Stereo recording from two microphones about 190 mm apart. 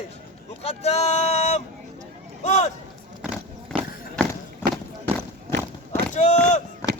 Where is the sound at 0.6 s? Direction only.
35° left (ahead or behind).